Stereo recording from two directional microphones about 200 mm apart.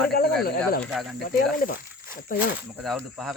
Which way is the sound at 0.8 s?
Centre (ahead or behind).